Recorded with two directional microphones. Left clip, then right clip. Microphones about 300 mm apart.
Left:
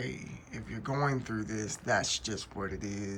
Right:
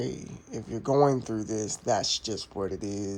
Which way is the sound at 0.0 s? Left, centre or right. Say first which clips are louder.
Right 5 dB; centre.